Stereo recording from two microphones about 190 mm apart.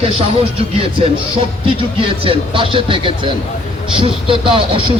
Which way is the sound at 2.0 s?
30° right (ahead or behind).